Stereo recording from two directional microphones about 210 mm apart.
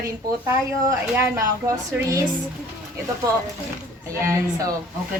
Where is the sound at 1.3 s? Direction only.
15° right (ahead or behind).